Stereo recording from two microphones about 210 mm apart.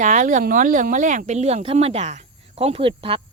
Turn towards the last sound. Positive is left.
turn(degrees=-25)  # may be behind; listen again after turning